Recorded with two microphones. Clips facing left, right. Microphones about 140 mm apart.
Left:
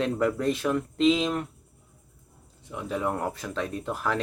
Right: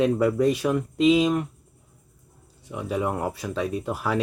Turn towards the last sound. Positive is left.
turn(degrees=-10)  # may be behind; listen again after turning